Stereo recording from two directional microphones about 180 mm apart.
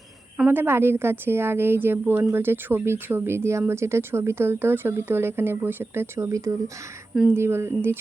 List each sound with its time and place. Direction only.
0.3 s a woman's voice: 10° right (ahead or behind)